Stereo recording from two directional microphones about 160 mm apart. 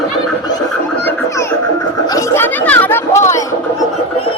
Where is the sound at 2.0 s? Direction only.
20° left (ahead or behind).